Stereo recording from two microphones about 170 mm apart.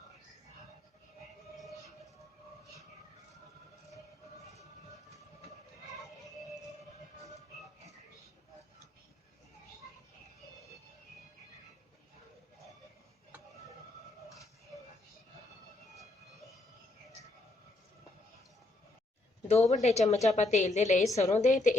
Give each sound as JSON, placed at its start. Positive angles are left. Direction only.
{"t": 19.5, "sound": "a woman's voice", "side_deg": 40}